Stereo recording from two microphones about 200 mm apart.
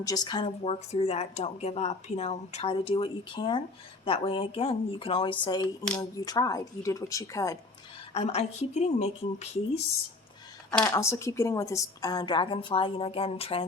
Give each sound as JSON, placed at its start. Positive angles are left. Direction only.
{"t": 0.0, "sound": "speech", "side_deg": 20}
{"t": 8.1, "sound": "a woman's voice", "side_deg": 30}
{"t": 10.8, "sound": "speech", "side_deg": 10}